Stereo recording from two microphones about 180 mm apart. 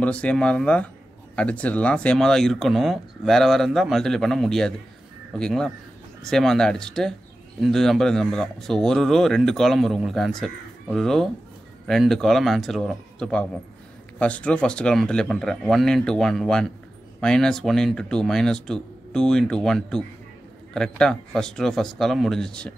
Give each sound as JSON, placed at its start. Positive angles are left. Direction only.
{"t": 0.0, "sound": "speech", "side_deg": 5}